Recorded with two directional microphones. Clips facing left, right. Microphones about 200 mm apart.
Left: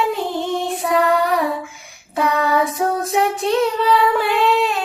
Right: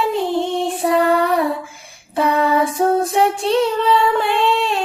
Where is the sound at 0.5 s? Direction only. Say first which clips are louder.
Right 2 dB; 30° right (ahead or behind).